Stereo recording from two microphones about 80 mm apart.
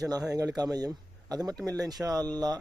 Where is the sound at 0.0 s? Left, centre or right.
Right.